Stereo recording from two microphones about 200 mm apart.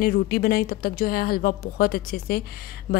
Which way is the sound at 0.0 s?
50° left (ahead or behind).